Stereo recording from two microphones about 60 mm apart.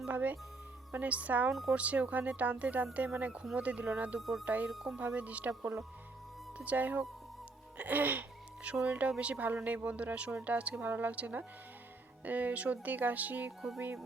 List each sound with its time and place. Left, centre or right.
0.1 s speech: right
4.2 s speech: centre
4.4 s speech: right
4.7 s speech: centre
4.9 s speech: right
13.7 s speech: right